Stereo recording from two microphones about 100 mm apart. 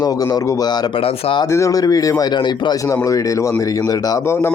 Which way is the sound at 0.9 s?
60° left (ahead or behind).